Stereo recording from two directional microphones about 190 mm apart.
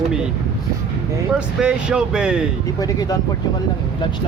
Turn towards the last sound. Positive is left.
turn(degrees=20)  # may be behind; listen again after turning